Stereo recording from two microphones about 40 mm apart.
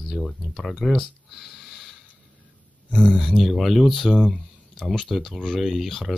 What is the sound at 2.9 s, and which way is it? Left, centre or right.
Speech, left.